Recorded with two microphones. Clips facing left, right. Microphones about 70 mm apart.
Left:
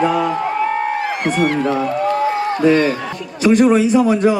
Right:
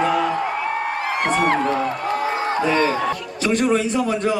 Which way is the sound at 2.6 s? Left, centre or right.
Right.